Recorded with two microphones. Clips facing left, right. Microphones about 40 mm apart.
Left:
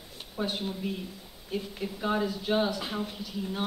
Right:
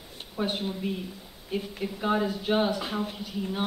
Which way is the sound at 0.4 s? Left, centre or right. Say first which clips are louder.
Right 2 dB; centre.